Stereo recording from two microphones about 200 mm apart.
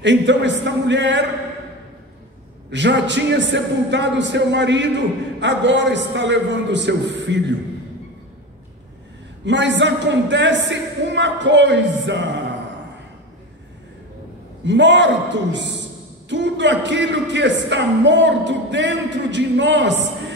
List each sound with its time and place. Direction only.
0.0 s speech: 65° right (ahead or behind)
2.7 s speech: 65° right (ahead or behind)
9.4 s speech: 65° right (ahead or behind)
14.6 s speech: 65° right (ahead or behind)